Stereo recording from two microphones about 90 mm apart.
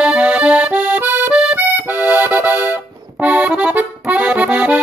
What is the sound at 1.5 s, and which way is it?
Accordion, 20° right (ahead or behind).